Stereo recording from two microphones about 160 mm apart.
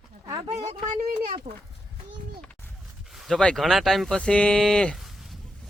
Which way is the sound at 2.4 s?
10° left (ahead or behind).